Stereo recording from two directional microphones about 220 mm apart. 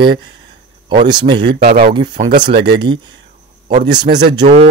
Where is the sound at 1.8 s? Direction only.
25° right (ahead or behind).